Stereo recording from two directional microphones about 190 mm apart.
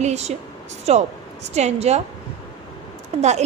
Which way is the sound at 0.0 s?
35° right (ahead or behind).